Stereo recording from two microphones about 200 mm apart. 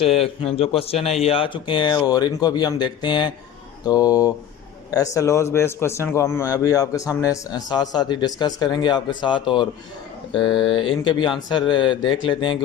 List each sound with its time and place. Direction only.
0.0 s a man's voice: 30° left (ahead or behind)